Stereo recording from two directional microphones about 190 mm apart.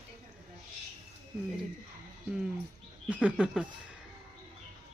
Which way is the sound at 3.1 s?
5° right (ahead or behind).